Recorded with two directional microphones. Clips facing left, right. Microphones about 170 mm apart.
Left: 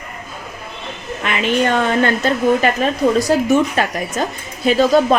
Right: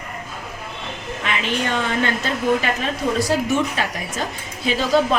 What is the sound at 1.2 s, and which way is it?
Speech, 50° left (ahead or behind).